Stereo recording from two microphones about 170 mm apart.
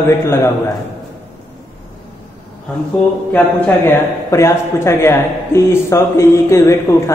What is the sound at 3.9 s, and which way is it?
A man's voice, 15° left (ahead or behind).